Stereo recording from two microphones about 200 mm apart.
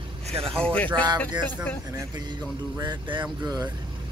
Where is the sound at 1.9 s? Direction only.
20° right (ahead or behind).